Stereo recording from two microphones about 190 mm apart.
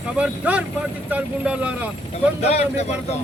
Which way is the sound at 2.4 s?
35° left (ahead or behind).